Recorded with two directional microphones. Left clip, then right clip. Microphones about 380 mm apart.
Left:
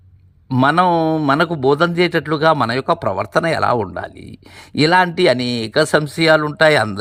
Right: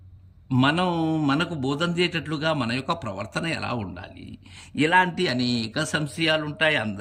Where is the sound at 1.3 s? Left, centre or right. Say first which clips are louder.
Left 11 dB; centre.